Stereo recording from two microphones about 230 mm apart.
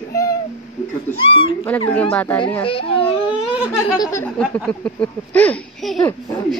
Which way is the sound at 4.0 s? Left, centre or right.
Centre.